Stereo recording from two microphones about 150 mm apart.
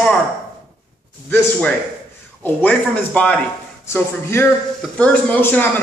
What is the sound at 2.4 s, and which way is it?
A man's voice, 10° left (ahead or behind).